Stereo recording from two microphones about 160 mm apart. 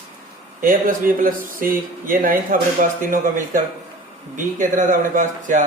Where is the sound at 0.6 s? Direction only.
60° right (ahead or behind).